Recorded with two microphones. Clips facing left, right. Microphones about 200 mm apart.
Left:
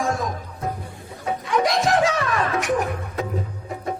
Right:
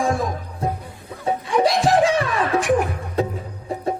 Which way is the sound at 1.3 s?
30° right (ahead or behind).